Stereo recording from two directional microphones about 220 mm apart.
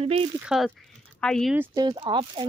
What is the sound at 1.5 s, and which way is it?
Speech, 15° right (ahead or behind).